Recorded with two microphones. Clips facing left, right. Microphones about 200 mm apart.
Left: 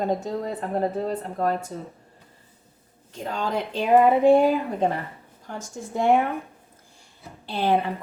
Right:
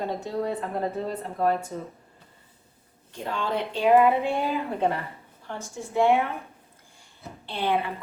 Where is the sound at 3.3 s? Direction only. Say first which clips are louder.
Left 1 dB; 40° left (ahead or behind).